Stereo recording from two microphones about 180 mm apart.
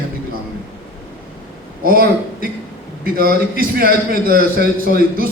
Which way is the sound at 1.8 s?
55° right (ahead or behind).